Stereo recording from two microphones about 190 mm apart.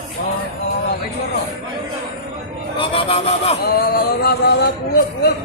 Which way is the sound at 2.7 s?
30° left (ahead or behind).